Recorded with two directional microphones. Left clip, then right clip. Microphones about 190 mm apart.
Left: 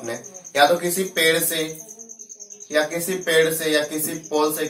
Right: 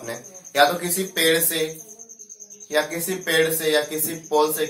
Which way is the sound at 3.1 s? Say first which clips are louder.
Left 3 dB; 15° right (ahead or behind).